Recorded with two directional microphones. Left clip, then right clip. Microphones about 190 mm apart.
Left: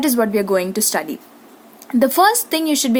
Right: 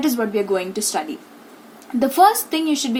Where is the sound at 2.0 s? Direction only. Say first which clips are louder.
Even; 45° left (ahead or behind).